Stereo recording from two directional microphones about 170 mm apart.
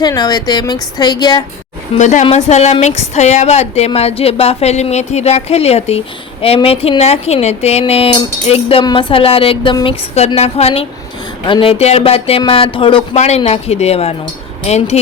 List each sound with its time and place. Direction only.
0.0 s speech: 25° left (ahead or behind)
2.0 s a woman's voice: 45° left (ahead or behind); by 13.0 s 30° left (ahead or behind)
13.1 s a woman's voice: 40° left (ahead or behind)